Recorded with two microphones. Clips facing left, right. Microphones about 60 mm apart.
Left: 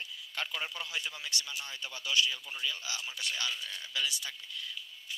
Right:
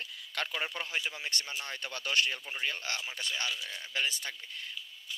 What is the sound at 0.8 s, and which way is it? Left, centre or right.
Speech, right.